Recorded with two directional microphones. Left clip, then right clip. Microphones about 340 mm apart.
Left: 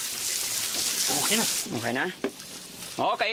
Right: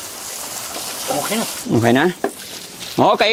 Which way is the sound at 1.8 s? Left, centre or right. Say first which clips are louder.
Right 15 dB; right.